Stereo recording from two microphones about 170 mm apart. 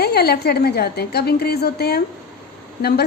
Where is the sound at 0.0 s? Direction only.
70° left (ahead or behind).